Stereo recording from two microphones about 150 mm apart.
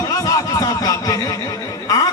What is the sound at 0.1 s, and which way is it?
A man's voice, 25° left (ahead or behind).